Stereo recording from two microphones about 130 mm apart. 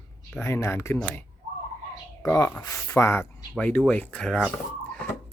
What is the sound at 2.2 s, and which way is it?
Speech, 20° left (ahead or behind).